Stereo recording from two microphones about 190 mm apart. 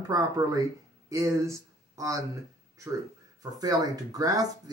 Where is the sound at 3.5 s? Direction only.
20° right (ahead or behind).